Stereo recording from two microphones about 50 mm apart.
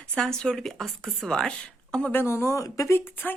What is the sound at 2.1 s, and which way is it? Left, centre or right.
Speech, left.